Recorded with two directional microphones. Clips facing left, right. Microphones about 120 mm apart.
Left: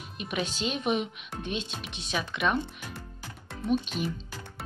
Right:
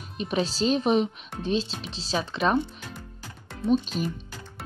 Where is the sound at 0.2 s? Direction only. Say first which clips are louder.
Right 6 dB; 35° right (ahead or behind).